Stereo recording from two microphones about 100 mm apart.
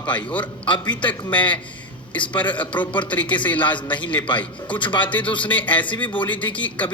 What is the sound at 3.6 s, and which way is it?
A man's voice, 55° left (ahead or behind).